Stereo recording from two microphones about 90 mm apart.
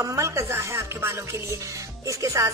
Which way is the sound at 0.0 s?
35° right (ahead or behind).